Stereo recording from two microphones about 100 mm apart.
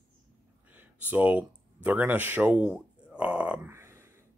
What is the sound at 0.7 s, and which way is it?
Speech, 15° right (ahead or behind).